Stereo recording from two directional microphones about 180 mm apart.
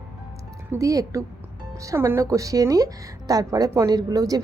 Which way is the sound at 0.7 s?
20° right (ahead or behind).